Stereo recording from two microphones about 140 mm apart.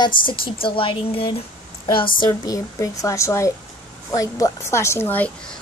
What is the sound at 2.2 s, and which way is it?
A woman's voice, 25° left (ahead or behind).